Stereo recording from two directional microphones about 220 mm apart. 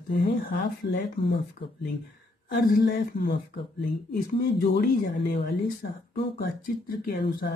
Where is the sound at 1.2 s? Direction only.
25° left (ahead or behind).